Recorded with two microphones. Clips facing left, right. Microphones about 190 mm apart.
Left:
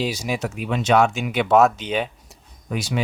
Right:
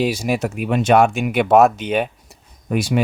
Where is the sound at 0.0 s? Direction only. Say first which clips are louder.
Right 5 dB; 55° right (ahead or behind).